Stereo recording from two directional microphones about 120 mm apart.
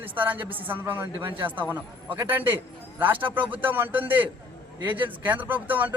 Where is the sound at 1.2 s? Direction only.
45° right (ahead or behind).